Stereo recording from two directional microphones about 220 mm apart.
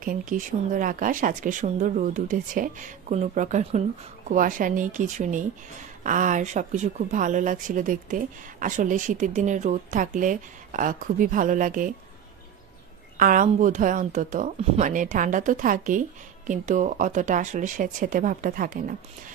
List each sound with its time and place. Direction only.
0.0 s speech: 40° right (ahead or behind)
13.2 s speech: 35° right (ahead or behind)